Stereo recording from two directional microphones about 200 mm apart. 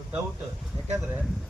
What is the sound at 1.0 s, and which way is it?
Speech, 5° right (ahead or behind).